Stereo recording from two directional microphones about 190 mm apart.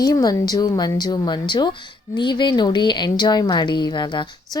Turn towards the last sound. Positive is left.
turn(degrees=25)  # may be behind; listen again after turning